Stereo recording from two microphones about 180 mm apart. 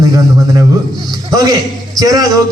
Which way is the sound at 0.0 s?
20° right (ahead or behind).